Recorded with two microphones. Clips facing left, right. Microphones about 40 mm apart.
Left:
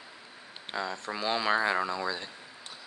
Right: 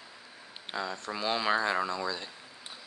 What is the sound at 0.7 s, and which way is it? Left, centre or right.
Speech, centre.